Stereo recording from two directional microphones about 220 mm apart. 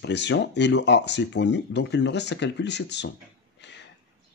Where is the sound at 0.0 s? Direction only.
50° left (ahead or behind).